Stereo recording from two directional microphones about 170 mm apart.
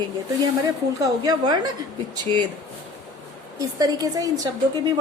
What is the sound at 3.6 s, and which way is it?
Speech, 20° right (ahead or behind).